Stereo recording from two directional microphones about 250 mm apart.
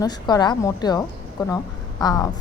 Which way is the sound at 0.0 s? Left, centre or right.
Centre.